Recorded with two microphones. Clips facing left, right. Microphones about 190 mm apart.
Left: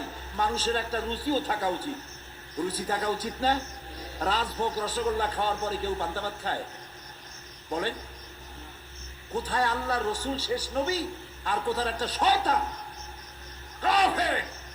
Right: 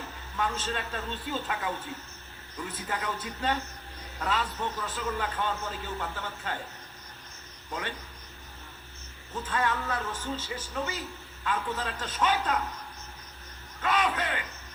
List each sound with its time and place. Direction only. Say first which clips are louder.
0.3 s a man's voice: left 4 dB; 40° left (ahead or behind)
7.7 s a man's voice: left 6 dB; 35° left (ahead or behind)
9.3 s a man's voice: left 2 dB; 35° left (ahead or behind)
13.8 s a man's voice: left 3 dB; 35° left (ahead or behind)